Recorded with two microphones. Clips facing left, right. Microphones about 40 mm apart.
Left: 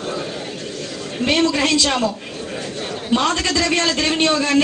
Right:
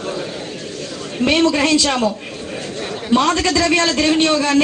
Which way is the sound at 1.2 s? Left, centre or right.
Right.